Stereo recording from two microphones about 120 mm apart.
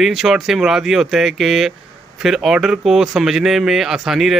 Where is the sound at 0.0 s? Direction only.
Centre (ahead or behind).